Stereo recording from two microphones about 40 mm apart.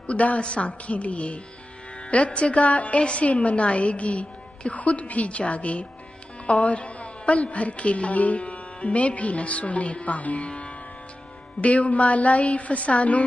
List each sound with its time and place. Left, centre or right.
0.0 s a woman's voice: left